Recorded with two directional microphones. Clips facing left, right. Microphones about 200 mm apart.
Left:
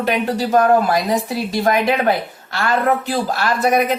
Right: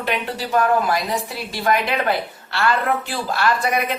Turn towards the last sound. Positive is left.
turn(degrees=40)  # may be behind; listen again after turning